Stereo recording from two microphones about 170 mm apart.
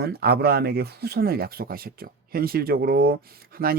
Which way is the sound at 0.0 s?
70° right (ahead or behind).